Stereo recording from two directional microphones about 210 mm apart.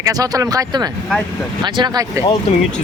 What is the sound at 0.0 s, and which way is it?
Speech, 15° right (ahead or behind).